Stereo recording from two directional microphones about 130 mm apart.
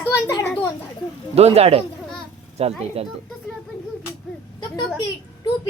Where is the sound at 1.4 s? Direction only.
50° right (ahead or behind).